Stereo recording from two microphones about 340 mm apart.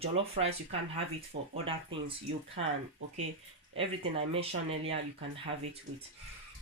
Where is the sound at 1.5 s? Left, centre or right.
Centre.